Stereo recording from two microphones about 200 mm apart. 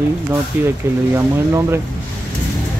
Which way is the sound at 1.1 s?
15° right (ahead or behind).